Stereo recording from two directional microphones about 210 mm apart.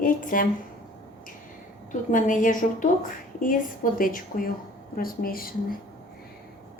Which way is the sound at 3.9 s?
40° left (ahead or behind).